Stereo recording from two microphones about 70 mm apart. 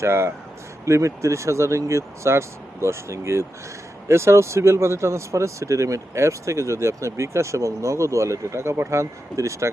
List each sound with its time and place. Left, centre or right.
0.0 s speech: right